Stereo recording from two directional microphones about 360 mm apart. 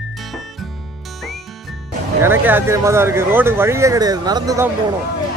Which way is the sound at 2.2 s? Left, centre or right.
Centre.